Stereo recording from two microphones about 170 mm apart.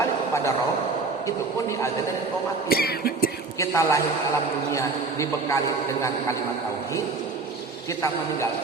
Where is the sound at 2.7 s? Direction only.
65° left (ahead or behind).